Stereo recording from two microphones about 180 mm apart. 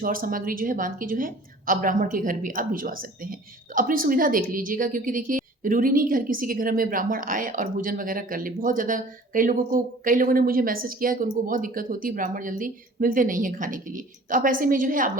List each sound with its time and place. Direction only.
0.0 s a woman's voice: 50° right (ahead or behind)